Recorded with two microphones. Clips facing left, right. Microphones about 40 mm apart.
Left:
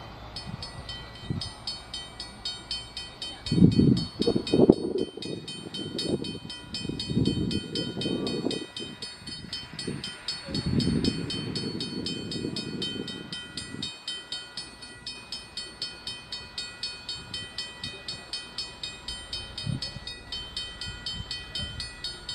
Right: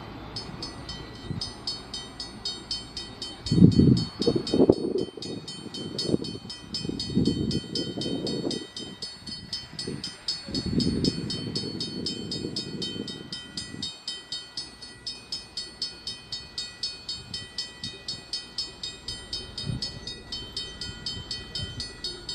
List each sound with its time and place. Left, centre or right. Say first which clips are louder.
3.4 s vehicle: right 2 dB; left
9.5 s train: even; left